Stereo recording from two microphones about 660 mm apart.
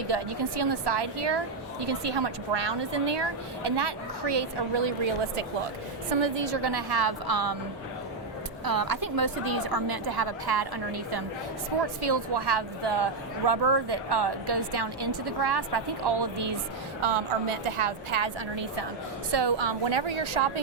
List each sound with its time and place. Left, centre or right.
0.1 s speech: right
6.1 s speech: right
8.6 s speech: right
17.0 s a woman's voice: right